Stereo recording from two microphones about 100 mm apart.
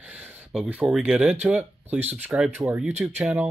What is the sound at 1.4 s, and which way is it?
Speech, 15° right (ahead or behind).